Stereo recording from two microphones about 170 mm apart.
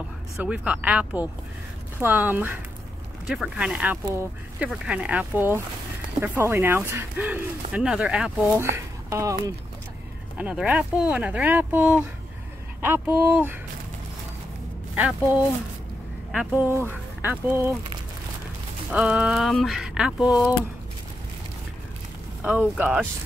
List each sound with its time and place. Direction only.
0.4 s speech: 5° right (ahead or behind)
8.5 s speech: 15° right (ahead or behind)
16.6 s speech: 10° right (ahead or behind)
18.9 s speech: 5° right (ahead or behind)
22.4 s speech: 5° right (ahead or behind)